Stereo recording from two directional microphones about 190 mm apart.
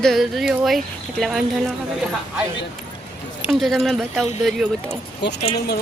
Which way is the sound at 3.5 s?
Centre (ahead or behind).